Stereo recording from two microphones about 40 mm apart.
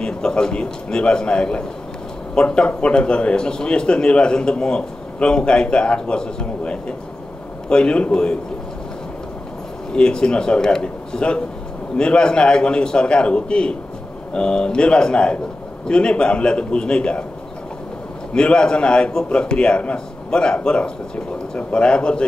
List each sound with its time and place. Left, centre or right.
0.0 s a man's voice: centre
9.9 s a man's voice: left
18.3 s a man's voice: left